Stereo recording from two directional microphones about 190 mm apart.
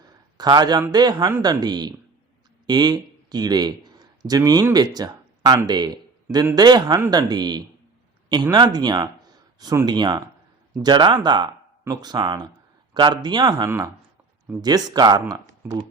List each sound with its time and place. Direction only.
0.3 s speech: 20° right (ahead or behind)